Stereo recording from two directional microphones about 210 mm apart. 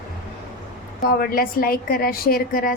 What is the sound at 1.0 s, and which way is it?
Speech, 45° left (ahead or behind).